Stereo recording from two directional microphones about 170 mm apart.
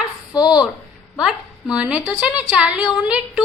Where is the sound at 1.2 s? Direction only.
5° right (ahead or behind).